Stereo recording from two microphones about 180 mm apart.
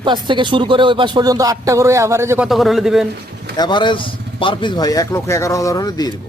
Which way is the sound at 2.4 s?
Centre (ahead or behind).